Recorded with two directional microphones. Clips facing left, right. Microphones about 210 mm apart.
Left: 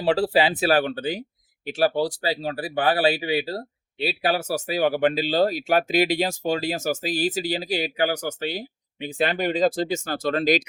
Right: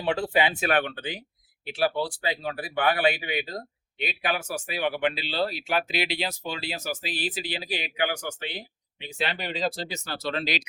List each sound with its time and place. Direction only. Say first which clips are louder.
0.0 s speech: left 5 dB; 35° left (ahead or behind)